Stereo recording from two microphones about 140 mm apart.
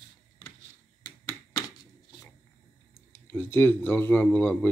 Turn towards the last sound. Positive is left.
turn(degrees=15)  # may be behind; listen again after turning